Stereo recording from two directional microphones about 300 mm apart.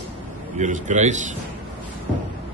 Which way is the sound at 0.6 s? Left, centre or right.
Right.